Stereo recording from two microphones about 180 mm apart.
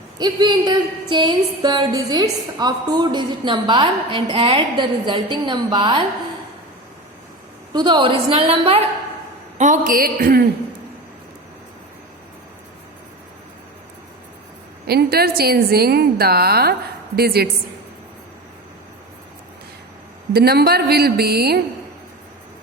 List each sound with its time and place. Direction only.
0.2 s a woman's voice: 25° right (ahead or behind)
7.7 s a woman's voice: 25° right (ahead or behind)
9.6 s a man's voice: 45° right (ahead or behind)
14.8 s a woman's voice: 60° right (ahead or behind)
20.3 s a woman's voice: 60° right (ahead or behind)